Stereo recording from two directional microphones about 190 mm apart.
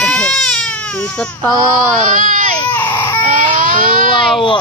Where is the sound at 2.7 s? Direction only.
10° left (ahead or behind).